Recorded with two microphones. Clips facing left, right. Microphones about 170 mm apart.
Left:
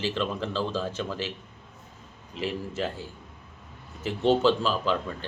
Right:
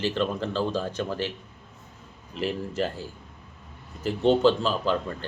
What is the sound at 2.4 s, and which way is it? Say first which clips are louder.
Speech: right 2 dB; centre (ahead or behind).